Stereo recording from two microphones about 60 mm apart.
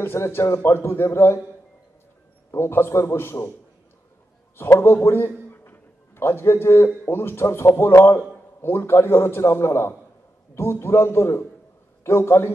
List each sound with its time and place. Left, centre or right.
0.0 s a man's voice: left
2.5 s a man's voice: left
4.6 s a man's voice: left
5.1 s a sound: left
7.1 s a man's voice: left